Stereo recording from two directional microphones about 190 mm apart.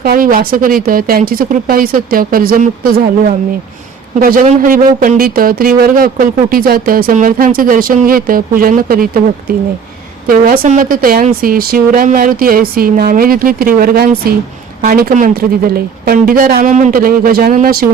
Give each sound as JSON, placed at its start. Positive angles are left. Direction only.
{"t": 0.0, "sound": "speech", "side_deg": -50}
{"t": 4.4, "sound": "speech", "side_deg": -45}
{"t": 10.2, "sound": "speech", "side_deg": -50}